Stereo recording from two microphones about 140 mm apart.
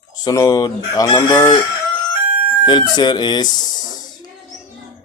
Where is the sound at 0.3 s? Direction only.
25° left (ahead or behind).